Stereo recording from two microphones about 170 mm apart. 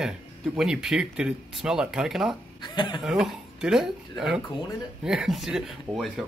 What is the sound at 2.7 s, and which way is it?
Speech, 30° left (ahead or behind).